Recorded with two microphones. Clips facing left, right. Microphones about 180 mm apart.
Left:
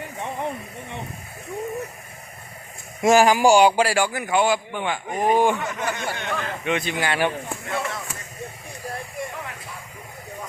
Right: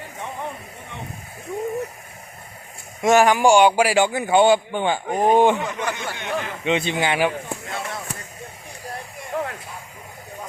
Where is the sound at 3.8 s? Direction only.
15° right (ahead or behind).